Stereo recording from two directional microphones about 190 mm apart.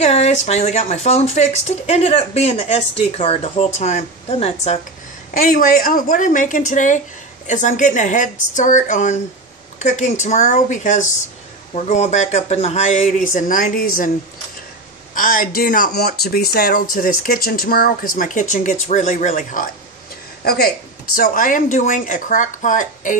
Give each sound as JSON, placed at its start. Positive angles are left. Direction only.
{"t": 0.0, "sound": "speech", "side_deg": 35}
{"t": 5.4, "sound": "speech", "side_deg": 50}
{"t": 15.1, "sound": "speech", "side_deg": 45}
{"t": 20.4, "sound": "speech", "side_deg": 55}